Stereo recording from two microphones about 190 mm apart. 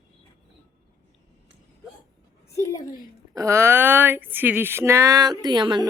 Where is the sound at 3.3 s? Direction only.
15° right (ahead or behind).